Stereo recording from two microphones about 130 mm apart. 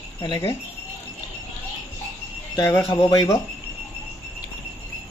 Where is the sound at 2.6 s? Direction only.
20° left (ahead or behind).